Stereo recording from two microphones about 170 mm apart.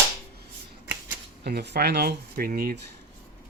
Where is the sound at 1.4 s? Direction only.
75° right (ahead or behind).